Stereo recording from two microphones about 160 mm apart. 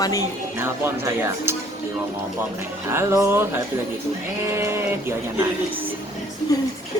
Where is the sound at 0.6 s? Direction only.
15° right (ahead or behind).